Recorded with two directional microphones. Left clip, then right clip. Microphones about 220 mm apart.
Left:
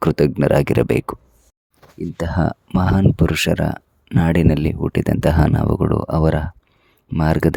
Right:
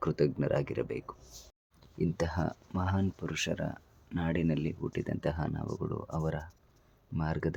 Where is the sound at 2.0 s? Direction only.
30° left (ahead or behind).